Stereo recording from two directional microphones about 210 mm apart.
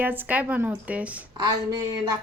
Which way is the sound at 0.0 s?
10° right (ahead or behind).